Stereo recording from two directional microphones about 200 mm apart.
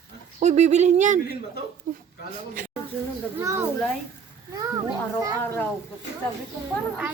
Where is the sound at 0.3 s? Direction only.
35° right (ahead or behind).